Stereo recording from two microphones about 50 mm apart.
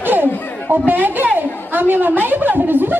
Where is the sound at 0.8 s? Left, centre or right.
Right.